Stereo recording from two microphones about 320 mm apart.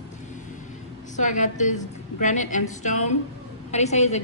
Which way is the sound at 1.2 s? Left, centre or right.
Left.